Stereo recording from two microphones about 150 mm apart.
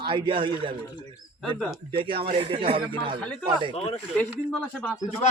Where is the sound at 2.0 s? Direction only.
35° right (ahead or behind).